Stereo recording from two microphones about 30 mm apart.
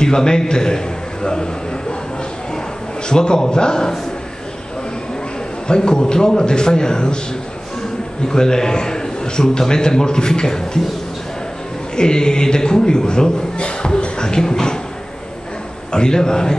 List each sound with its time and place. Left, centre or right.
0.0 s a man's voice: left
3.1 s a man's voice: left
5.8 s a man's voice: left
8.3 s a man's voice: left
11.9 s a man's voice: left
13.6 s music: left
15.9 s a man's voice: left